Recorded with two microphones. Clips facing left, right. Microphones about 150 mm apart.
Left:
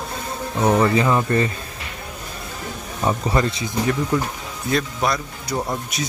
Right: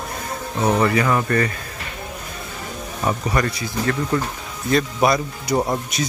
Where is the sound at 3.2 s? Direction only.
25° left (ahead or behind).